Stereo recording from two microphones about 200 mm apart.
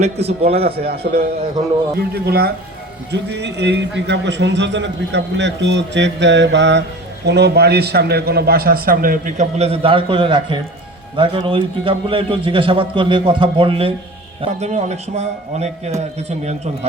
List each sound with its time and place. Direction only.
0.0 s a man's voice: 30° right (ahead or behind)
0.8 s a man's voice: 50° right (ahead or behind); by 16.6 s 30° right (ahead or behind)